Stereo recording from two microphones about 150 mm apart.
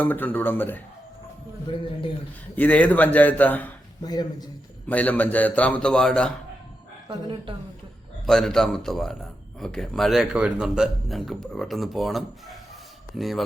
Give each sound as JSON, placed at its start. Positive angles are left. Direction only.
{"t": 0.0, "sound": "a man's voice", "side_deg": 10}
{"t": 1.6, "sound": "speech", "side_deg": 35}
{"t": 2.6, "sound": "a man's voice", "side_deg": 10}
{"t": 4.0, "sound": "a man's voice", "side_deg": 25}
{"t": 4.9, "sound": "a man's voice", "side_deg": 10}
{"t": 7.1, "sound": "a woman's voice", "side_deg": -35}
{"t": 8.3, "sound": "speech", "side_deg": 0}